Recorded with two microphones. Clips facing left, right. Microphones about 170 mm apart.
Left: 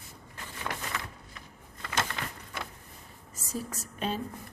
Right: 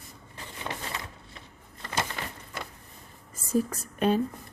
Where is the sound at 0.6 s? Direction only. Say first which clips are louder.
Even; 25° right (ahead or behind).